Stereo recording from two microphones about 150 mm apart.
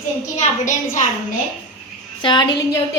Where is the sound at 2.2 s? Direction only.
30° left (ahead or behind).